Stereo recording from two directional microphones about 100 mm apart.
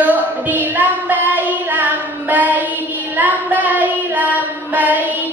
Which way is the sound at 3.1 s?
15° right (ahead or behind).